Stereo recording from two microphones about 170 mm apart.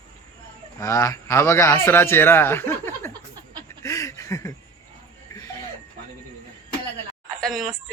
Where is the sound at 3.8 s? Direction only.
20° left (ahead or behind).